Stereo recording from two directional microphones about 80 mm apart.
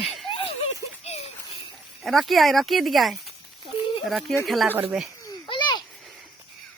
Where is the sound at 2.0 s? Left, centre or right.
Centre.